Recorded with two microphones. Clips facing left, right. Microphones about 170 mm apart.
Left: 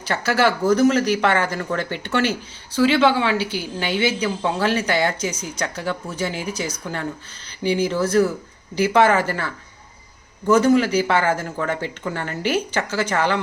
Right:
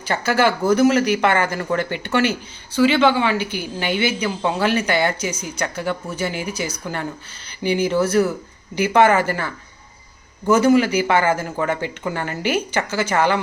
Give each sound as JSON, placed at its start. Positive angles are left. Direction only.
{"t": 0.0, "sound": "speech", "side_deg": 0}
{"t": 3.3, "sound": "a woman's voice", "side_deg": -55}
{"t": 3.6, "sound": "speech", "side_deg": 0}
{"t": 10.5, "sound": "speech", "side_deg": -5}